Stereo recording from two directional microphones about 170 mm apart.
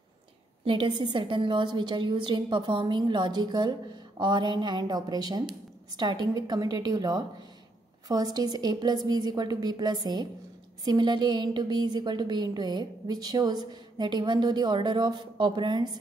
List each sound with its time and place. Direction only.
0.7 s a woman's voice: 30° right (ahead or behind)